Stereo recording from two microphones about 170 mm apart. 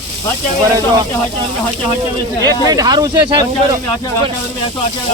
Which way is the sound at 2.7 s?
20° right (ahead or behind).